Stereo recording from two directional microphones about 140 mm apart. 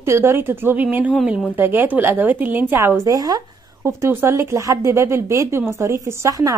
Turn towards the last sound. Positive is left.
turn(degrees=-25)  # may be behind; listen again after turning